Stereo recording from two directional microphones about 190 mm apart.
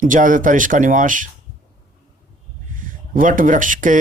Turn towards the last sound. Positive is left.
turn(degrees=-45)  # may be behind; listen again after turning